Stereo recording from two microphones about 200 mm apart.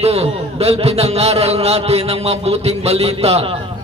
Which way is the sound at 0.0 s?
30° right (ahead or behind).